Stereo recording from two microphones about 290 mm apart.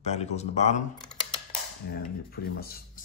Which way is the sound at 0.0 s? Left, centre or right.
Left.